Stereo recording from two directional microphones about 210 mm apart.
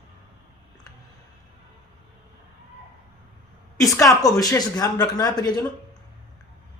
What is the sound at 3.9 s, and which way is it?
Speech, 15° left (ahead or behind).